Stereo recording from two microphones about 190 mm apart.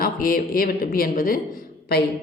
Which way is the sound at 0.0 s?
50° left (ahead or behind).